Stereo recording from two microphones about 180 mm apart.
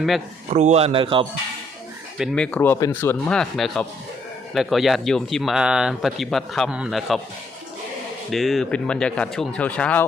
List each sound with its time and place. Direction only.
0.5 s speech: 35° right (ahead or behind)
2.1 s speech: centre (ahead or behind)
8.3 s speech: centre (ahead or behind)